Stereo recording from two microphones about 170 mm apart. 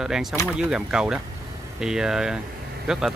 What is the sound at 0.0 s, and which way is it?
Speech, centre (ahead or behind).